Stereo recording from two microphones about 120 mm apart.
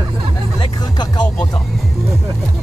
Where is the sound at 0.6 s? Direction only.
35° left (ahead or behind).